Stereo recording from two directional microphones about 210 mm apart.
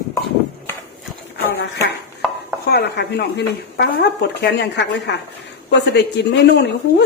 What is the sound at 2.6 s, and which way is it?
Speech, 50° left (ahead or behind).